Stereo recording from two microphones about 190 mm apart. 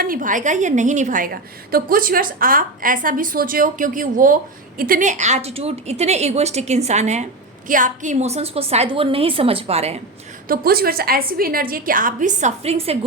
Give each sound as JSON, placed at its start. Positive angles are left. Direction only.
{"t": 0.0, "sound": "a woman's voice", "side_deg": -45}
{"t": 10.5, "sound": "a woman's voice", "side_deg": -50}